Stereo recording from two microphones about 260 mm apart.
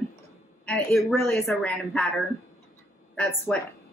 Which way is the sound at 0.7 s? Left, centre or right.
Centre.